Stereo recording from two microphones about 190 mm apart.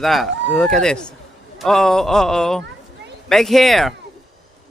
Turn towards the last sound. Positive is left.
turn(degrees=0)  # may be behind; listen again after turning